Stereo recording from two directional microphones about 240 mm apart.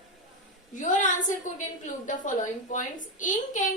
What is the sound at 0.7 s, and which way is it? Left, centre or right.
A woman's voice, left.